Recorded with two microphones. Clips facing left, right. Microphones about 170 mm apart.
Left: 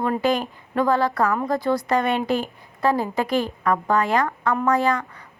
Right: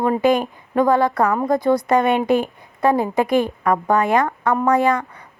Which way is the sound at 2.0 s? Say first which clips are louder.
Right 5 dB; 50° right (ahead or behind).